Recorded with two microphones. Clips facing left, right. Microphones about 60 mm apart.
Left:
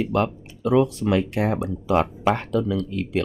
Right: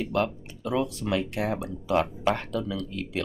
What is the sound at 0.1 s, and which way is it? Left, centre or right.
Speech, left.